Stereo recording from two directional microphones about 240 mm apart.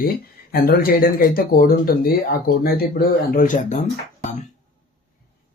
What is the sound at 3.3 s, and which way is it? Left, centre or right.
Speech, left.